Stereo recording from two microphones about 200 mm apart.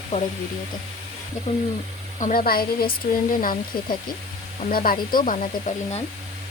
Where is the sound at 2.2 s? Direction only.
45° left (ahead or behind).